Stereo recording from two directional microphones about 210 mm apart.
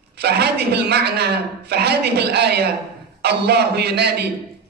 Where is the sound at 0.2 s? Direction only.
50° right (ahead or behind).